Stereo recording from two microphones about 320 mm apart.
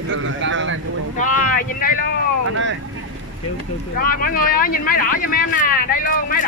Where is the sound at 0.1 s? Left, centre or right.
Right.